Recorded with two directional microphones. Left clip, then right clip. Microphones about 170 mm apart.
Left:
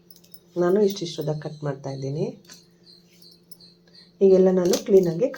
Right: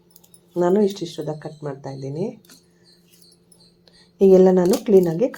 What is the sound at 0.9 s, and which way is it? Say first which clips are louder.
Speech: even; 15° right (ahead or behind).